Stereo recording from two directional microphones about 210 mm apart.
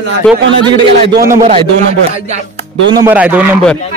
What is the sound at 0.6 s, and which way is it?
Speech, 20° right (ahead or behind).